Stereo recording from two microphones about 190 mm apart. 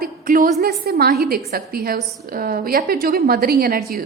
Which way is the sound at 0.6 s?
55° right (ahead or behind).